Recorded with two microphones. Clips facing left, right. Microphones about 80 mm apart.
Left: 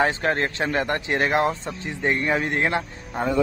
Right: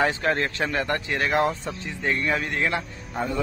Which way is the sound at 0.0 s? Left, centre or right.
Left.